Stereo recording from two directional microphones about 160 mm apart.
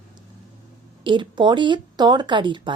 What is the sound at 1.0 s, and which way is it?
A woman's voice, 30° right (ahead or behind).